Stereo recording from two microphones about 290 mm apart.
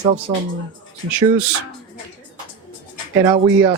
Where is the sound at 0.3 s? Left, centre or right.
Centre.